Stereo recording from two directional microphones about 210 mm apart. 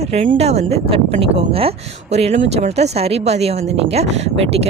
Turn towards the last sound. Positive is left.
turn(degrees=-30)  # may be behind; listen again after turning